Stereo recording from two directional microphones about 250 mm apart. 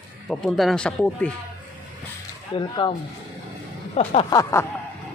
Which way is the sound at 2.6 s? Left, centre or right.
Centre.